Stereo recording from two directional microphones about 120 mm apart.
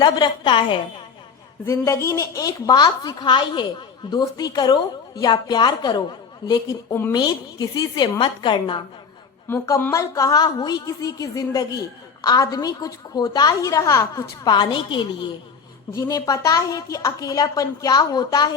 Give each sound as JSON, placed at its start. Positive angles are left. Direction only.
{"t": 0.0, "sound": "a woman's voice", "side_deg": 40}
{"t": 1.6, "sound": "a woman's voice", "side_deg": 20}
{"t": 9.9, "sound": "a woman's voice", "side_deg": 30}